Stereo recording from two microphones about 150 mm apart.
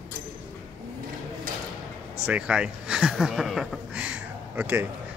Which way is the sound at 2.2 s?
5° right (ahead or behind).